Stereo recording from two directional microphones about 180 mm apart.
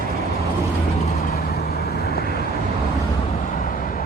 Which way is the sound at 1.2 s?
60° left (ahead or behind).